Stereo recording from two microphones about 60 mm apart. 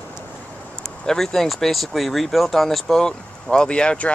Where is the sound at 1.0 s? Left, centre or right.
Centre.